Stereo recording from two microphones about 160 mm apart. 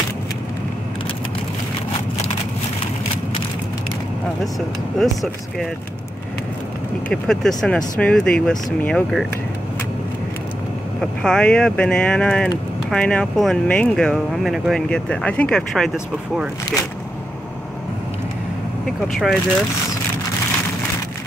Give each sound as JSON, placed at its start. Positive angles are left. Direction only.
{"t": 4.6, "sound": "speech", "side_deg": 0}
{"t": 7.1, "sound": "speech", "side_deg": 5}
{"t": 11.0, "sound": "speech", "side_deg": 5}
{"t": 18.9, "sound": "speech", "side_deg": 0}